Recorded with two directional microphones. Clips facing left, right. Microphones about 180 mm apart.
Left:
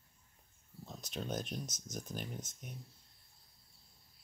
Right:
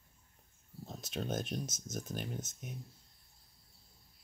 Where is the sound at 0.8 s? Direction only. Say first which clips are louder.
Right 3 dB; 45° right (ahead or behind).